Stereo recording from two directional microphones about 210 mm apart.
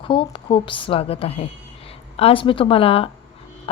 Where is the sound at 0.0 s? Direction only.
25° left (ahead or behind).